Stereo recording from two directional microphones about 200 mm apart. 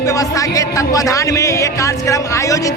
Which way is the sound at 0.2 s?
15° left (ahead or behind).